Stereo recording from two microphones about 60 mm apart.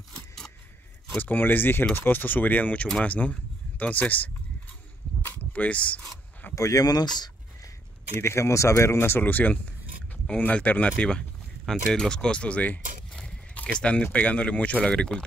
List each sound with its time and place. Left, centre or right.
1.1 s speech: left
5.5 s speech: left
6.5 s speech: left
8.2 s speech: left; by 15.2 s centre